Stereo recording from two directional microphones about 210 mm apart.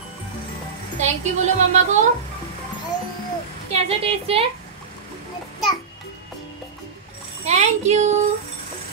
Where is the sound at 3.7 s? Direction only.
30° right (ahead or behind).